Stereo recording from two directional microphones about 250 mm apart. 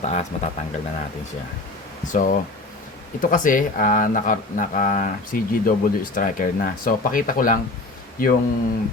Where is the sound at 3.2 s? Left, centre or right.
Left.